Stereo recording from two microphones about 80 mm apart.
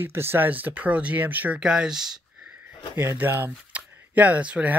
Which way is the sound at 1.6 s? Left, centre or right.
Centre.